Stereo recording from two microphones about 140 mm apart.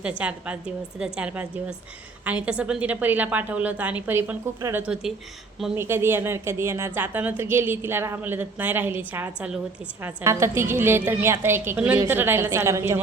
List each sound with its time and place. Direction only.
0.0 s a woman's voice: 10° right (ahead or behind)